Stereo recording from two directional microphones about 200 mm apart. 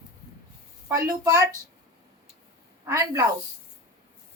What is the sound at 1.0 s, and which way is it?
Speech, 15° right (ahead or behind).